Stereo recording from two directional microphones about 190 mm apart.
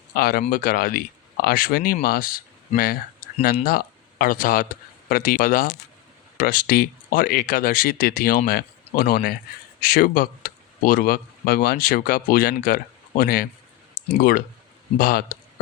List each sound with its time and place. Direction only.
0.2 s speech: 55° left (ahead or behind)